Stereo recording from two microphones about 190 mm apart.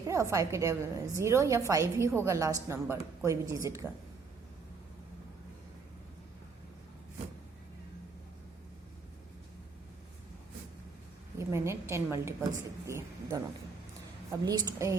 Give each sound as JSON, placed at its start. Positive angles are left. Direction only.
{"t": 0.0, "sound": "a woman's voice", "side_deg": -15}
{"t": 11.3, "sound": "a woman's voice", "side_deg": -15}